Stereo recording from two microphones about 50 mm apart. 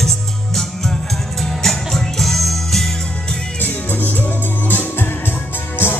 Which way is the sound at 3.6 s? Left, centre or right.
Left.